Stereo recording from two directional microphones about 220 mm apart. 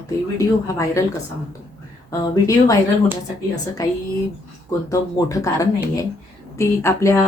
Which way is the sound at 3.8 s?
15° left (ahead or behind).